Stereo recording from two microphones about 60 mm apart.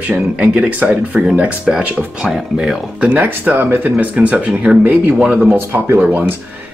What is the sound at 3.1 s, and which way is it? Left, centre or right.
Speech, right.